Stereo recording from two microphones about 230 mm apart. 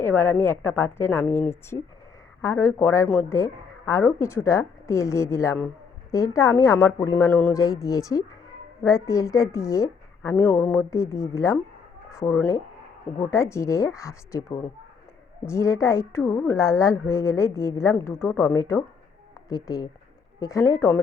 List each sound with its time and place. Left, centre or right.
0.0 s a woman's voice: centre